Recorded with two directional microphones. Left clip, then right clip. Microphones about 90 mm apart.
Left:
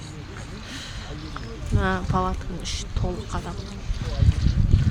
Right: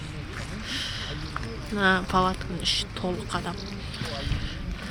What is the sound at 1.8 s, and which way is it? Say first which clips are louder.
Speech: right 3 dB; 5° left (ahead or behind).